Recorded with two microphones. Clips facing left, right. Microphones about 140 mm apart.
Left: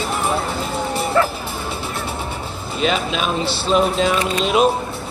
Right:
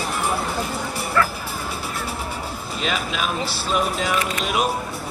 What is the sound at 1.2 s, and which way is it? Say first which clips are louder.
Speech: left 3 dB; 20° left (ahead or behind).